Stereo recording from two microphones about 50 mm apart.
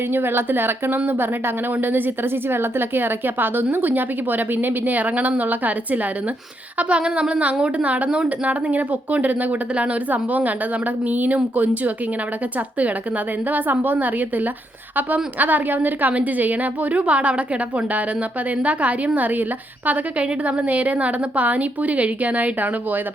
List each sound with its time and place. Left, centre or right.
0.1 s speech: right
6.7 s a sound: right
8.4 s speech: right
13.5 s speech: right